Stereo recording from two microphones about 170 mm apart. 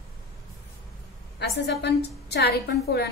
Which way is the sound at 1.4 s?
80° left.